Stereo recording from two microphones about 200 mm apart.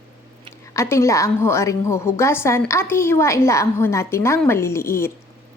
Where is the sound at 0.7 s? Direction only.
15° left (ahead or behind).